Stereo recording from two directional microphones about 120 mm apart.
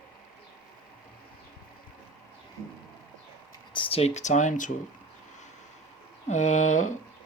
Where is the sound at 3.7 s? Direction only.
45° left (ahead or behind).